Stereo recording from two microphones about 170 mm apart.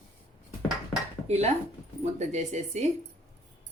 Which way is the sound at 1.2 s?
40° right (ahead or behind).